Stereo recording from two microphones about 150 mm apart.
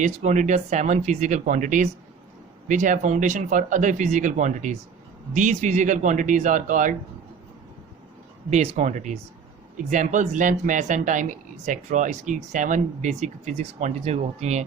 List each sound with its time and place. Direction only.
0.0 s speech: 50° right (ahead or behind)
8.4 s speech: 50° right (ahead or behind)